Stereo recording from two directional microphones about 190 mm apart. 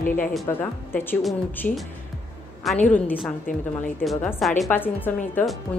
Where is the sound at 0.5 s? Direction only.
10° left (ahead or behind).